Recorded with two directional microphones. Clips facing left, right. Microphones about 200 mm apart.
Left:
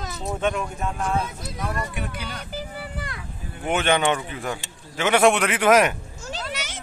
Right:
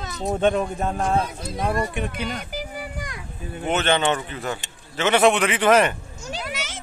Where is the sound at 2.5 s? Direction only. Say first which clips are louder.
Right 1 dB; 15° right (ahead or behind).